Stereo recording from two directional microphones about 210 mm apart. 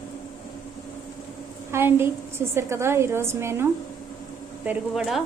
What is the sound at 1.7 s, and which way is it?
A woman's voice, 10° right (ahead or behind).